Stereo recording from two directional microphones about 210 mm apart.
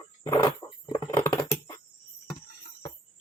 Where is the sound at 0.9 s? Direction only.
20° left (ahead or behind).